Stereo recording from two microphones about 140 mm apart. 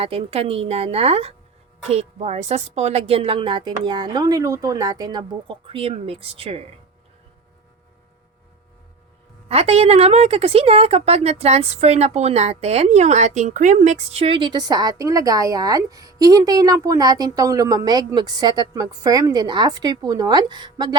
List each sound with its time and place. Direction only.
0.0 s a woman's voice: 45° right (ahead or behind)
9.5 s a woman's voice: 45° right (ahead or behind)